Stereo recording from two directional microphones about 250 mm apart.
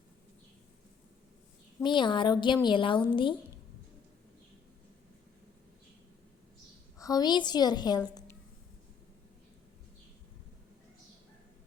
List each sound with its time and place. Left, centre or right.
1.8 s speech: centre
7.0 s a woman's voice: centre